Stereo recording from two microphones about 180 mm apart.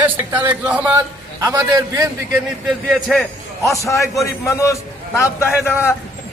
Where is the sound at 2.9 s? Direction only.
Centre (ahead or behind).